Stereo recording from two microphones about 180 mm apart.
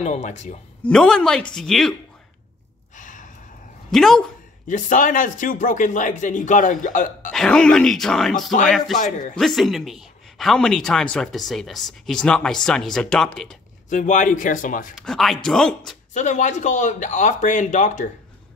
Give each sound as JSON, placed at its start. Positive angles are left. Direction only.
{"t": 0.0, "sound": "a man's voice", "side_deg": 40}
{"t": 0.8, "sound": "speech", "side_deg": 5}
{"t": 3.0, "sound": "sigh", "side_deg": 45}
{"t": 3.9, "sound": "speech", "side_deg": 0}
{"t": 4.6, "sound": "speech", "side_deg": 45}
{"t": 7.3, "sound": "speech", "side_deg": 5}
{"t": 8.9, "sound": "speech", "side_deg": 45}
{"t": 9.4, "sound": "speech", "side_deg": 0}
{"t": 13.8, "sound": "speech", "side_deg": 45}
{"t": 15.0, "sound": "speech", "side_deg": 0}
{"t": 16.1, "sound": "speech", "side_deg": 40}